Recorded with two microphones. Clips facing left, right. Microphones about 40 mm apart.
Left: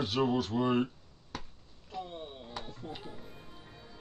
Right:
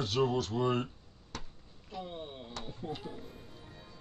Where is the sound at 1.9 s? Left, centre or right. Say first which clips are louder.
Left 1 dB; centre.